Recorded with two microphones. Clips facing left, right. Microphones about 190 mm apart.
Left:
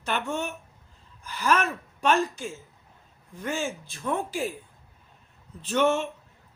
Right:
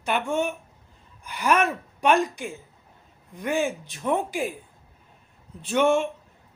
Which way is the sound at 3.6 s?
15° right (ahead or behind).